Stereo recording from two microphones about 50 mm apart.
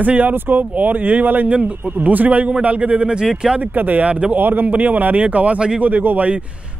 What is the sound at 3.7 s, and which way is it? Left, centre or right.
Speech, right.